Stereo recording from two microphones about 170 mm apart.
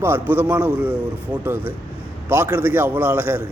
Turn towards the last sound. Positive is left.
turn(degrees=-15)  # may be behind; listen again after turning